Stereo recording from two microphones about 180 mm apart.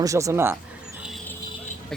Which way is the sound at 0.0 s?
20° right (ahead or behind).